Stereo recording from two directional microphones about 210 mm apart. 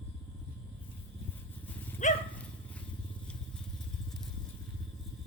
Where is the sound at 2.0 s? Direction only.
35° left (ahead or behind).